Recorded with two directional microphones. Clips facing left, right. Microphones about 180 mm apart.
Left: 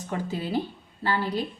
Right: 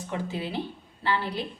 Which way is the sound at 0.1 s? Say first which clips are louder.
Left 3 dB; 40° left (ahead or behind).